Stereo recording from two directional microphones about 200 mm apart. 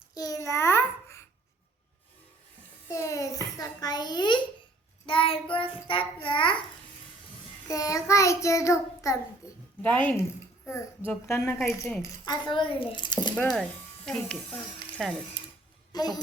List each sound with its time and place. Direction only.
0.1 s babbling: 20° left (ahead or behind)
2.9 s a sound: 15° left (ahead or behind)
5.0 s a child's voice: 25° left (ahead or behind)
7.7 s child singing: 15° left (ahead or behind)
12.2 s a child's voice: 20° left (ahead or behind)
13.3 s speech: 5° left (ahead or behind)
15.9 s a child's voice: 20° left (ahead or behind)